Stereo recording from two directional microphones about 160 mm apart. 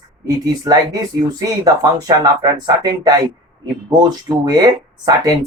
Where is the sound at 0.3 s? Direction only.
25° right (ahead or behind).